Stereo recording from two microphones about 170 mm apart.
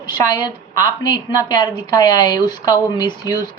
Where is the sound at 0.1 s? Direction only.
25° left (ahead or behind).